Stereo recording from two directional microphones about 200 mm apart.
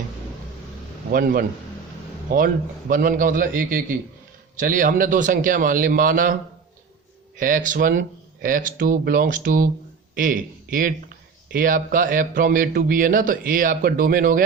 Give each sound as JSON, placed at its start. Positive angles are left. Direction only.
{"t": 1.1, "sound": "speech", "side_deg": -45}
{"t": 2.9, "sound": "speech", "side_deg": -45}
{"t": 7.3, "sound": "speech", "side_deg": -45}